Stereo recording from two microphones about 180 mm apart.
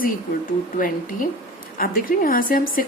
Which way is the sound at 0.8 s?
50° left (ahead or behind).